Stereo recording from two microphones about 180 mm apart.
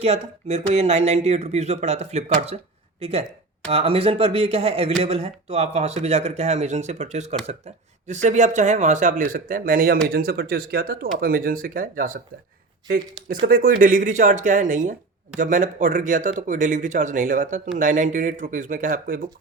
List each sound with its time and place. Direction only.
0.0 s speech: 35° right (ahead or behind)
13.4 s speech: 50° right (ahead or behind)